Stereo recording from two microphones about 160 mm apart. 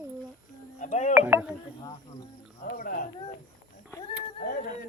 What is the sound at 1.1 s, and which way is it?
Speech, 10° right (ahead or behind).